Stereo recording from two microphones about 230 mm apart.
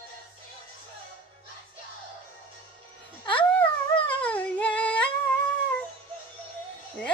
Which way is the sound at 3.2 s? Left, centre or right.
Left.